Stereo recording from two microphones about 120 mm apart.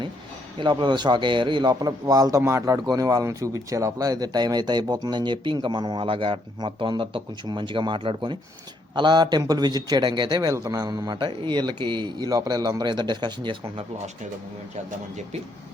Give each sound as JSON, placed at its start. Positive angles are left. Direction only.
{"t": 0.6, "sound": "speech", "side_deg": -40}